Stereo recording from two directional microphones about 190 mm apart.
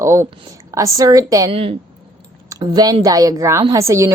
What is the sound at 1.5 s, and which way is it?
A woman's voice, 30° right (ahead or behind).